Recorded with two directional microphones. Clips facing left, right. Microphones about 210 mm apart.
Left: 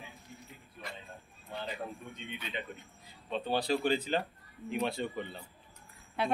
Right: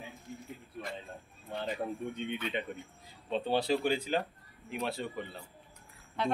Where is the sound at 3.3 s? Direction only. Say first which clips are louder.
Right 2 dB; 30° right (ahead or behind); by 5.4 s centre (ahead or behind).